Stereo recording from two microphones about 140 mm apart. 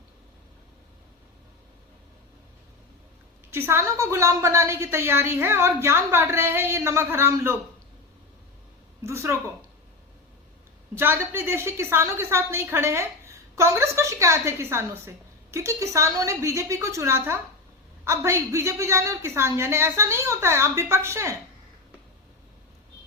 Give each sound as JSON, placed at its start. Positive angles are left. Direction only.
{"t": 3.5, "sound": "a woman's voice", "side_deg": -20}
{"t": 9.0, "sound": "a woman's voice", "side_deg": -20}
{"t": 10.9, "sound": "a woman's voice", "side_deg": -15}